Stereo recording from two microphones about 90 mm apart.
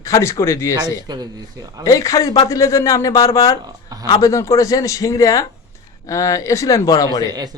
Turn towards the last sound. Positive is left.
turn(degrees=40)  # may be behind; listen again after turning